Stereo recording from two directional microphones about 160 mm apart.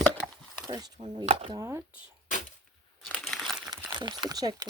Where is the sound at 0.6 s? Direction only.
25° right (ahead or behind).